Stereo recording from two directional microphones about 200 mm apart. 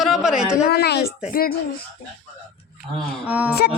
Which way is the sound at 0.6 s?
55° left (ahead or behind).